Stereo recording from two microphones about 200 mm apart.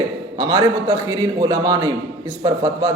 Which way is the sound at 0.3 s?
15° right (ahead or behind).